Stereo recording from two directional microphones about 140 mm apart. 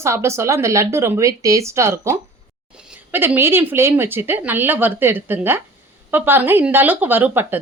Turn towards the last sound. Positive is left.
turn(degrees=-15)  # may be behind; listen again after turning